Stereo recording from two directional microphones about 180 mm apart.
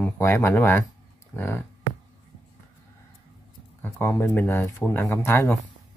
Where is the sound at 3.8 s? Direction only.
15° left (ahead or behind).